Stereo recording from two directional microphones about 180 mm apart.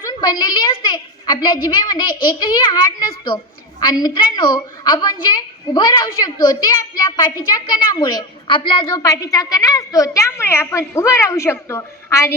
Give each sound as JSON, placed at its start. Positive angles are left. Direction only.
{"t": 0.0, "sound": "a woman's voice", "side_deg": 20}